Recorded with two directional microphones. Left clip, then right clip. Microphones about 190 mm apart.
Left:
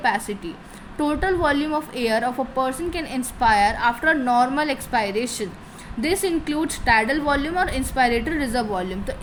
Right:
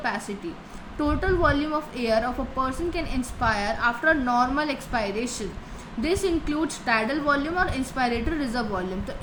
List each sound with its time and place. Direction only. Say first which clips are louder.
0.9 s a woman's voice: left 3 dB; 40° left (ahead or behind)